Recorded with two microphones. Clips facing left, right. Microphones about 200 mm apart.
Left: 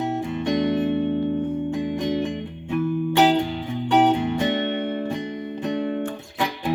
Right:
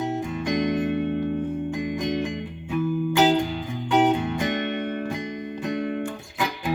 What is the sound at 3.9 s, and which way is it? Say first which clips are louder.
Music: left 2 dB; 30° left (ahead or behind).